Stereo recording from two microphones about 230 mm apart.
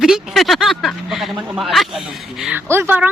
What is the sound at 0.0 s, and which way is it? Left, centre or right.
Speech, centre.